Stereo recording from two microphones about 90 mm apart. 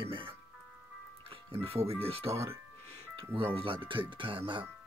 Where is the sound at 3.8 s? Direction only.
65° right (ahead or behind).